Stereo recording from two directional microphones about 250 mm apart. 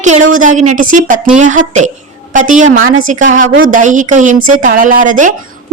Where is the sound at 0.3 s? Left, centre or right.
Right.